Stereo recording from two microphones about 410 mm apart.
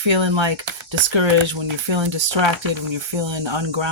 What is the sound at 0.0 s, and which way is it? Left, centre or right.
Speech, right.